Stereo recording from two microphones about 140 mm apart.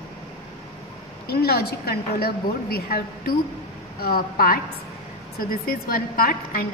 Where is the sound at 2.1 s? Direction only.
90° left.